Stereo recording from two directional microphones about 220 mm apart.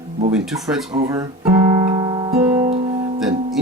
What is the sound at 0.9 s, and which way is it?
Speech, 15° right (ahead or behind).